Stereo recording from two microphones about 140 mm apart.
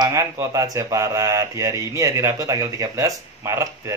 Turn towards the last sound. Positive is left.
turn(degrees=-20)  # may be behind; listen again after turning